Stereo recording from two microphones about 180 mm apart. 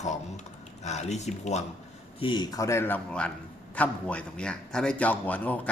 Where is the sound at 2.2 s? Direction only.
25° left (ahead or behind).